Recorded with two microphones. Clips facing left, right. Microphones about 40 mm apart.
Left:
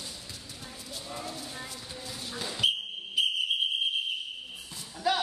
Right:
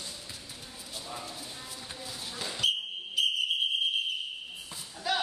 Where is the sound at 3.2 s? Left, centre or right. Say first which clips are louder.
Left 1 dB; centre.